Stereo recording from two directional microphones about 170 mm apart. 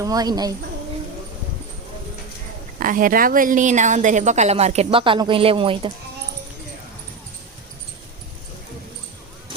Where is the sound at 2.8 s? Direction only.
55° right (ahead or behind); by 5.9 s 30° right (ahead or behind).